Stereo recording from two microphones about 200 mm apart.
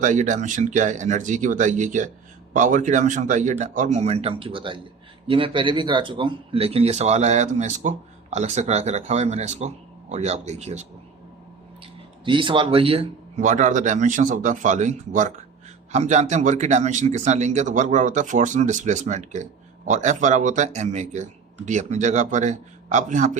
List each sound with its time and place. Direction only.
0.0 s speech: 40° right (ahead or behind)
12.2 s speech: 25° right (ahead or behind)